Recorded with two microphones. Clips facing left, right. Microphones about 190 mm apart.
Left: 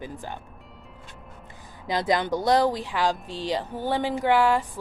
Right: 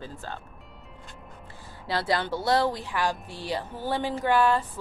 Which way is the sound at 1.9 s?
15° left (ahead or behind).